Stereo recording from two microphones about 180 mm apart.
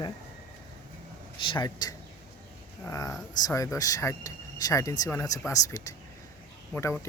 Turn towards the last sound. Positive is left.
turn(degrees=15)  # may be behind; listen again after turning